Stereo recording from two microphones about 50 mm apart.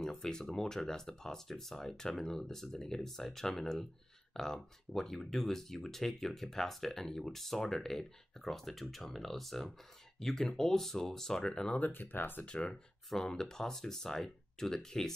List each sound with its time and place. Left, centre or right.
0.0 s speech: centre
11.8 s speech: left
12.4 s speech: left
13.1 s speech: centre